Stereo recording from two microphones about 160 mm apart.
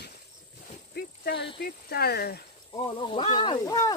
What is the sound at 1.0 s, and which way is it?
Snake, 75° left (ahead or behind).